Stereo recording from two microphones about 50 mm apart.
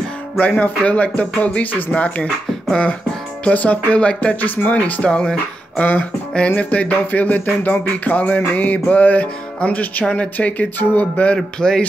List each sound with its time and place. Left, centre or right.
0.4 s speech: left
3.4 s speech: left
4.4 s music: left
4.7 s speech: left
5.1 s speech: centre
6.3 s music: left
11.3 s speech: centre